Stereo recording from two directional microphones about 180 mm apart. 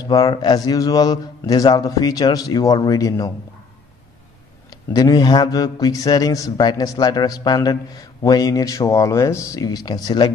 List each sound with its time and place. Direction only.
0.0 s speech: 20° left (ahead or behind)
4.6 s speech: 20° left (ahead or behind)